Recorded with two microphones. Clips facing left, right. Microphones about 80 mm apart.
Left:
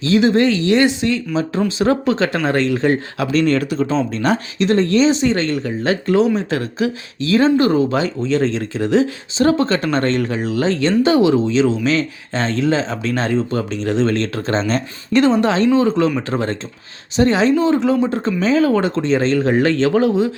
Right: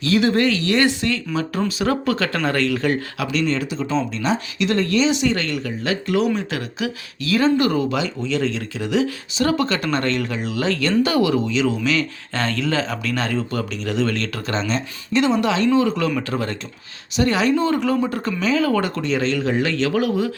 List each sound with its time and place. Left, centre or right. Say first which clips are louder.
0.0 s speech: left 4 dB; left
3.4 s speech: left 6 dB; left
4.5 s speech: left 5 dB; left